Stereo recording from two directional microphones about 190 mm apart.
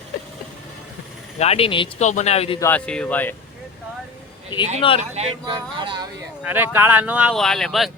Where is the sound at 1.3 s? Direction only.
35° left (ahead or behind).